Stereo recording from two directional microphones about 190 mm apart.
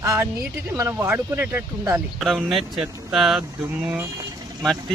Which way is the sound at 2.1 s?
Centre (ahead or behind).